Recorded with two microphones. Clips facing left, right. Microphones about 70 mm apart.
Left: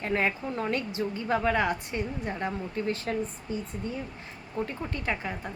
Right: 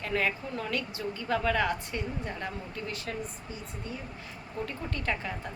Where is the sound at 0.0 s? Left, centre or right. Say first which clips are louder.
Left 2 dB; left.